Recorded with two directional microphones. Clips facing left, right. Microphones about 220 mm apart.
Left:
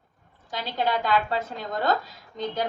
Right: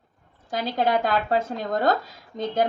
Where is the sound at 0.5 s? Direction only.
45° right (ahead or behind).